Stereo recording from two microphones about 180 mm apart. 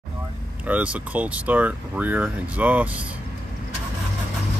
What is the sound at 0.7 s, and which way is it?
Speech, 10° right (ahead or behind).